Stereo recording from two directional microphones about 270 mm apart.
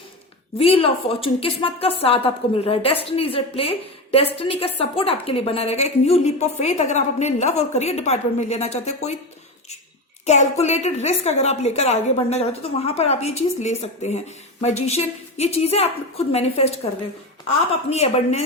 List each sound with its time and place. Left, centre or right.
0.6 s a woman's voice: left
10.2 s a woman's voice: left